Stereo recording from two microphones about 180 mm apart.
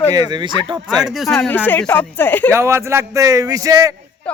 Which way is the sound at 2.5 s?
15° right (ahead or behind).